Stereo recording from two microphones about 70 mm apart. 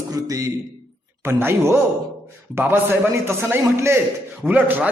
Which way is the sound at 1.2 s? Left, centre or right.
Right.